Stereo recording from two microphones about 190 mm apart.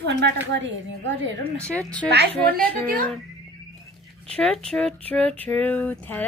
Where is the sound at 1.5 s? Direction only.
5° left (ahead or behind).